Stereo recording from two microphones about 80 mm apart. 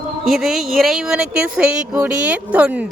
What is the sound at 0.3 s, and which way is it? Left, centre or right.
Speech, centre.